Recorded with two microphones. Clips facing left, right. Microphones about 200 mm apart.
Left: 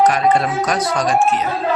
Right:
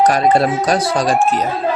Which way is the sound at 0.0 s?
35° right (ahead or behind).